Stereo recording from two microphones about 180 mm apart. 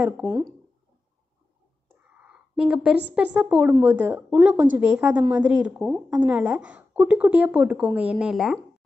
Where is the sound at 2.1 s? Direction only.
5° right (ahead or behind).